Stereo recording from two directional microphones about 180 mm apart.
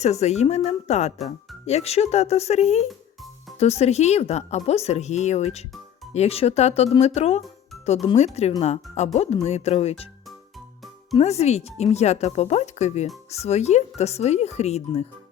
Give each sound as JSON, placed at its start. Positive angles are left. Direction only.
{"t": 0.0, "sound": "speech", "side_deg": 40}
{"t": 11.2, "sound": "speech", "side_deg": 35}